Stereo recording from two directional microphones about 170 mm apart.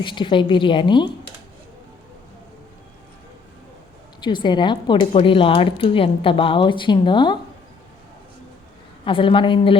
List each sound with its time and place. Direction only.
0.0 s speech: 30° left (ahead or behind)
4.2 s speech: 25° left (ahead or behind)
9.0 s a woman's voice: 30° left (ahead or behind)